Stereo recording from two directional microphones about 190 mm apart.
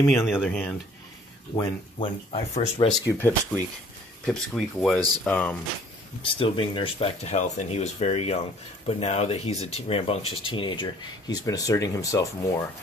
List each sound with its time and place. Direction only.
0.2 s speech: 10° left (ahead or behind)
1.5 s speech: 25° left (ahead or behind)
2.9 s speech: 10° left (ahead or behind)
6.2 s speech: 25° left (ahead or behind)